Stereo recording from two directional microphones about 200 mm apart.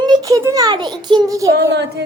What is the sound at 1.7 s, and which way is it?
Child singing, 55° right (ahead or behind).